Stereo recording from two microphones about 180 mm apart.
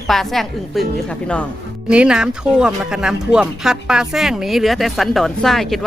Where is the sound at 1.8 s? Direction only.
5° right (ahead or behind).